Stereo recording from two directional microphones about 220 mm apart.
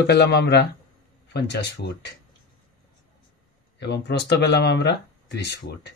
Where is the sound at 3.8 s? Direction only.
50° left (ahead or behind).